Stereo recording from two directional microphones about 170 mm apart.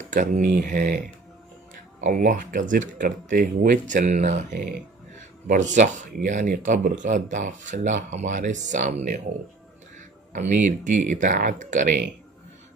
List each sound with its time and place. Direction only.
0.0 s speech: 50° right (ahead or behind)
2.0 s speech: 50° right (ahead or behind)